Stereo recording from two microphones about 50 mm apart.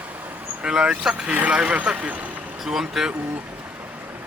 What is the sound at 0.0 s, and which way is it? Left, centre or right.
Vehicle, right.